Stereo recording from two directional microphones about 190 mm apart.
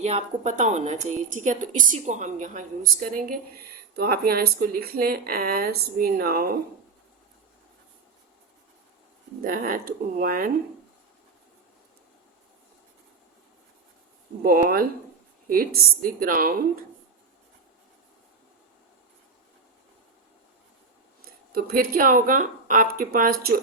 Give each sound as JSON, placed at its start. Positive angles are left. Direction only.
{"t": 0.0, "sound": "a woman's voice", "side_deg": -35}
{"t": 9.4, "sound": "speech", "side_deg": -50}
{"t": 14.4, "sound": "speech", "side_deg": -50}
{"t": 21.5, "sound": "speech", "side_deg": -50}